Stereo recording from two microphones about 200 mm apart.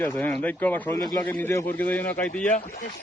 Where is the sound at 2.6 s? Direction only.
45° left (ahead or behind).